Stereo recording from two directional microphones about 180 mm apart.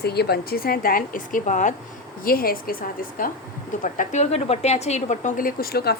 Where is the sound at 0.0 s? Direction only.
65° left (ahead or behind); by 1.7 s 45° left (ahead or behind).